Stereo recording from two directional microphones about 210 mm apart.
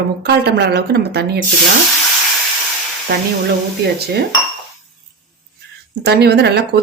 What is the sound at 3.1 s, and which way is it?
Speech, 45° right (ahead or behind).